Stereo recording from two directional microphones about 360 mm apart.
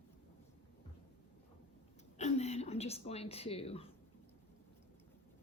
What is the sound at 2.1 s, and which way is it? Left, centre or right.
A woman's voice, centre.